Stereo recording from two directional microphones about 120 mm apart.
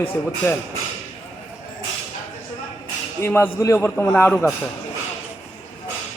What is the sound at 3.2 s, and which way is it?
A man's voice, 20° left (ahead or behind).